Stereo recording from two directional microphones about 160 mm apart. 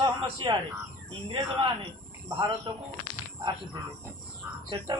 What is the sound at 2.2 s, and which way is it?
Speech, 25° right (ahead or behind).